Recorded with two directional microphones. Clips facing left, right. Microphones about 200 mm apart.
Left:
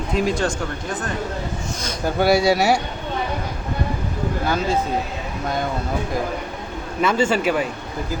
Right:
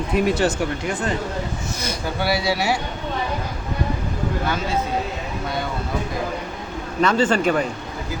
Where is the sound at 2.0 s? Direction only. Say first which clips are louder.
Left 7 dB; 45° left (ahead or behind).